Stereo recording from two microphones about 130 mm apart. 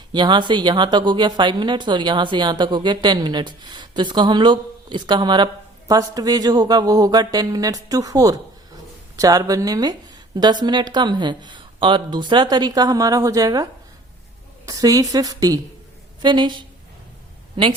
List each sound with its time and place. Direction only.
0.1 s speech: 35° right (ahead or behind)
14.7 s a woman's voice: 25° right (ahead or behind); by 17.7 s 45° right (ahead or behind)